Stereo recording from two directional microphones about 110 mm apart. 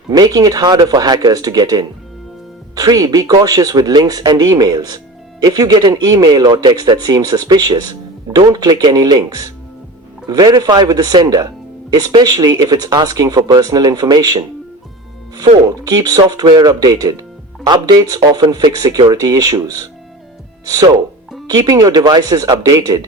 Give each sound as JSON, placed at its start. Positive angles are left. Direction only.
{"t": 0.1, "sound": "speech", "side_deg": -35}
{"t": 15.6, "sound": "speech", "side_deg": -35}